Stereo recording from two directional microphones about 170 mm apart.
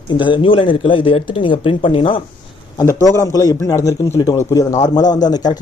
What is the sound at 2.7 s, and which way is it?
A man's voice, 20° left (ahead or behind).